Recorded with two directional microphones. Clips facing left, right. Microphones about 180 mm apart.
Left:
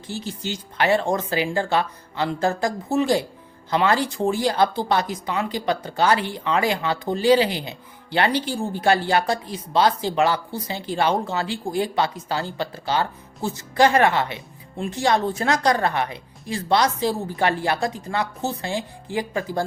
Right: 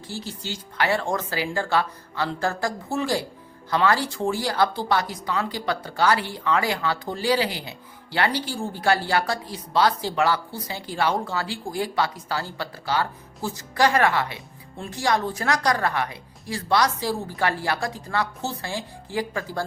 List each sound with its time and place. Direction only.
0.1 s speech: 20° left (ahead or behind)